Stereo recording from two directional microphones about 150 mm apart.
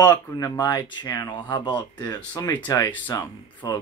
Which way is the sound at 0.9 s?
25° left (ahead or behind).